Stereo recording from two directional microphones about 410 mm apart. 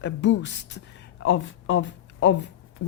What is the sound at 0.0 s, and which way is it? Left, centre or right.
A woman's voice, left.